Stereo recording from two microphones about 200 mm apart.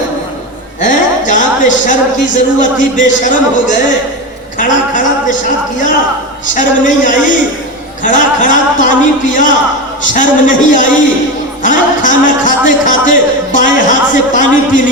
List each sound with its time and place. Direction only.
0.8 s a man's voice: 40° left (ahead or behind)